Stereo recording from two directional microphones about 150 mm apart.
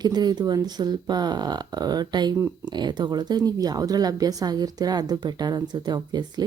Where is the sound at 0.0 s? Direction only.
30° right (ahead or behind).